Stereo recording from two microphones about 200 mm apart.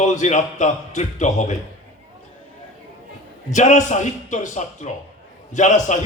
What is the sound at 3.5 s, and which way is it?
A man's voice, 35° left (ahead or behind).